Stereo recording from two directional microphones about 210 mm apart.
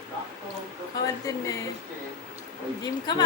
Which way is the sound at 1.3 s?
15° left (ahead or behind).